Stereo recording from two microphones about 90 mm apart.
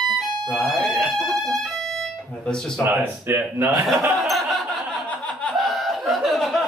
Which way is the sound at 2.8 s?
25° right (ahead or behind).